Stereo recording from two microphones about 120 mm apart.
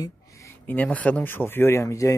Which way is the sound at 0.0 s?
25° left (ahead or behind).